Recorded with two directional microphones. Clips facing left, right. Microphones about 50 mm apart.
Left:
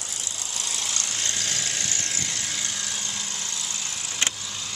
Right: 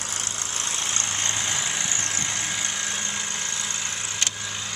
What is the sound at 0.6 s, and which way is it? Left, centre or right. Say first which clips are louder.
Vehicle: right 2 dB; right.